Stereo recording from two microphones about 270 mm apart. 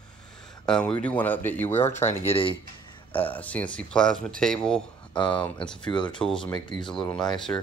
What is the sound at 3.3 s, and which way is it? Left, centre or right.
Speech, centre.